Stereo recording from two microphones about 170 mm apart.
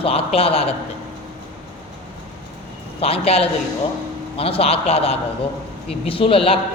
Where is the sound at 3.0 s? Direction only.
35° left (ahead or behind).